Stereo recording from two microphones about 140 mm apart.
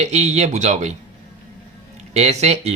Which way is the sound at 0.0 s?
50° right (ahead or behind).